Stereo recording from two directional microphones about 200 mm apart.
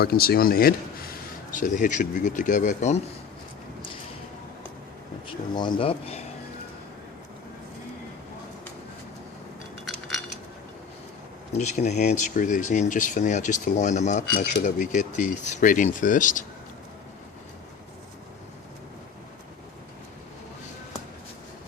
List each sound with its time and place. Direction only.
0.0 s speech: 50° left (ahead or behind)
5.5 s speech: 25° left (ahead or behind)
9.8 s a sound: centre (ahead or behind)
11.5 s speech: 35° left (ahead or behind)